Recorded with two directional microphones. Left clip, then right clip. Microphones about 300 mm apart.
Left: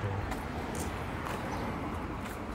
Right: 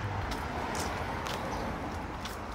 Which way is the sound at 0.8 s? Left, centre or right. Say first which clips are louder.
Right 3 dB; right.